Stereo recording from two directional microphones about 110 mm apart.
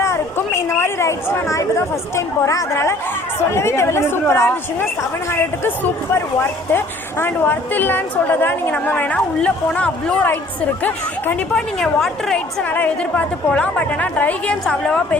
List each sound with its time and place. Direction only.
0.0 s a sound: 25° left (ahead or behind)
2.1 s a woman's voice: 25° left (ahead or behind)
11.8 s a woman's voice: 5° left (ahead or behind)
12.6 s a woman's voice: 15° left (ahead or behind)